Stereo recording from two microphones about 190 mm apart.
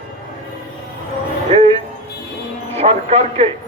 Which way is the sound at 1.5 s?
30° right (ahead or behind).